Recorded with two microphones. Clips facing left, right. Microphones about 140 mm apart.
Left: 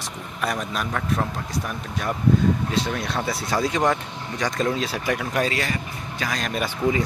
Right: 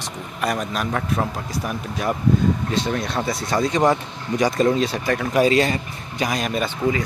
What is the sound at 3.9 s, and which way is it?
A man's voice, 10° right (ahead or behind).